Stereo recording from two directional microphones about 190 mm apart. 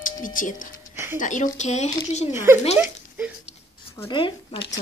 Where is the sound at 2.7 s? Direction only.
5° right (ahead or behind).